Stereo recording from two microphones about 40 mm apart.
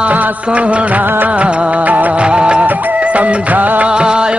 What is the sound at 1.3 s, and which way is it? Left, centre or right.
Music, right.